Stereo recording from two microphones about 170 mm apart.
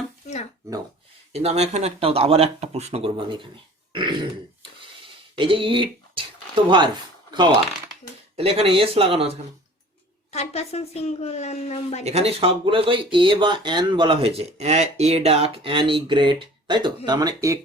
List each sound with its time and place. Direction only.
1.3 s speech: 35° right (ahead or behind)
3.9 s throat clearing: 30° right (ahead or behind)
5.4 s speech: 30° right (ahead or behind)
10.3 s a woman's voice: 40° left (ahead or behind)
12.0 s speech: 35° right (ahead or behind); by 17.6 s 20° right (ahead or behind)